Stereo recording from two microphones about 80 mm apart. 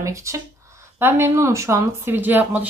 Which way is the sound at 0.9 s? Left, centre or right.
Right.